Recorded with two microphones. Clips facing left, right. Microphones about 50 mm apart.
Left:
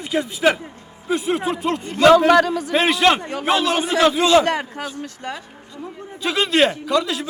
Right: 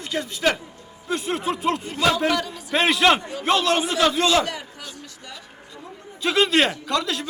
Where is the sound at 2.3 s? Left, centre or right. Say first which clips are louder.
Left 10 dB; left.